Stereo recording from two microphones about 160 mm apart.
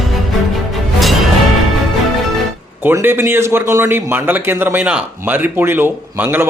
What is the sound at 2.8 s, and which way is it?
Speech, 15° right (ahead or behind).